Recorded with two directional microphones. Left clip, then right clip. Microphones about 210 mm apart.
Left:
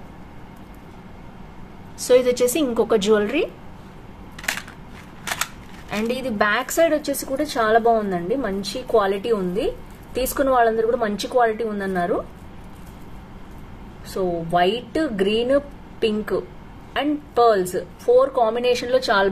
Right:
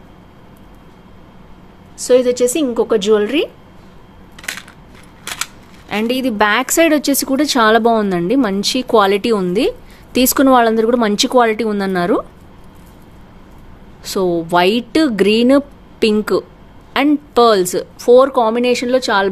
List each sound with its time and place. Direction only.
2.0 s a woman's voice: 20° right (ahead or behind)
4.4 s crushing: centre (ahead or behind)
5.2 s a sound: 5° left (ahead or behind)
5.9 s a woman's voice: 35° right (ahead or behind)
14.1 s a woman's voice: 50° right (ahead or behind); by 19.3 s 35° right (ahead or behind)